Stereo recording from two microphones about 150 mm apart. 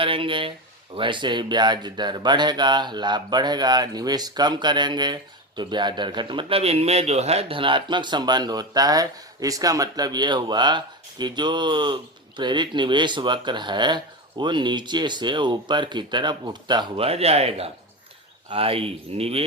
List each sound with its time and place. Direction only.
0.0 s speech: 35° right (ahead or behind)